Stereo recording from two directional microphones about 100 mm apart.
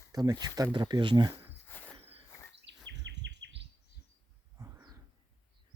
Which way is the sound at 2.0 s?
90° right.